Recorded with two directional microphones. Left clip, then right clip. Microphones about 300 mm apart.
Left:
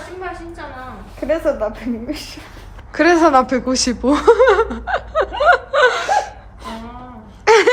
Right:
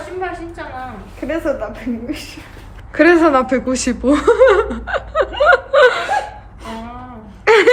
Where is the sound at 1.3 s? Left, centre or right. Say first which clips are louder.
Left 2 dB; left.